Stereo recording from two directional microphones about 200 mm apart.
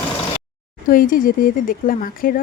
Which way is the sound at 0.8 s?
45° left (ahead or behind).